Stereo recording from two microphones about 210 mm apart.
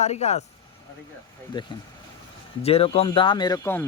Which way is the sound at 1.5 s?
20° left (ahead or behind).